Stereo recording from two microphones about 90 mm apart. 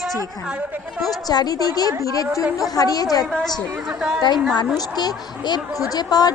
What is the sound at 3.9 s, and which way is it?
Speech, 5° right (ahead or behind).